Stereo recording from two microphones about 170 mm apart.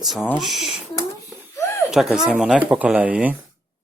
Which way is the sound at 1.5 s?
15° left (ahead or behind).